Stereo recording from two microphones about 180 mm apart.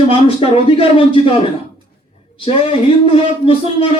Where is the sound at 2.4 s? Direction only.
30° left (ahead or behind).